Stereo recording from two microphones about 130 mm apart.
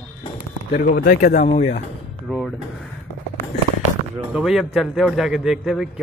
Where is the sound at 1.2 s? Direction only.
65° left (ahead or behind).